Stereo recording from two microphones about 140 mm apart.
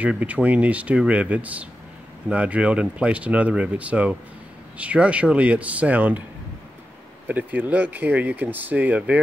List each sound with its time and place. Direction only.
0.0 s speech: 10° right (ahead or behind)
7.2 s speech: 10° right (ahead or behind)